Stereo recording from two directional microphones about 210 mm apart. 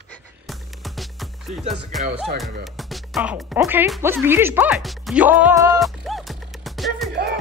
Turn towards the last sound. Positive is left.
turn(degrees=0)  # may be behind; listen again after turning